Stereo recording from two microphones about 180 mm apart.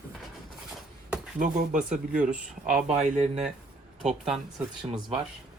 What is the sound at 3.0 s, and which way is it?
Speech, 40° right (ahead or behind).